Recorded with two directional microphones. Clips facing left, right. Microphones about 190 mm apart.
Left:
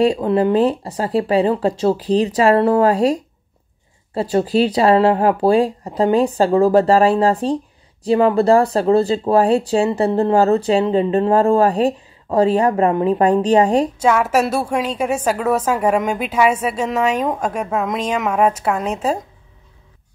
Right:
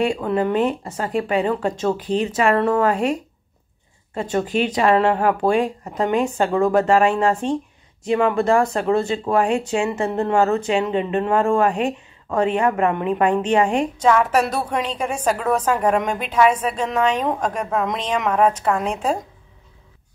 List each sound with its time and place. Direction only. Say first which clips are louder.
0.0 s speech: left 5 dB; 35° left (ahead or behind)
14.0 s a woman's voice: right 3 dB; 5° left (ahead or behind)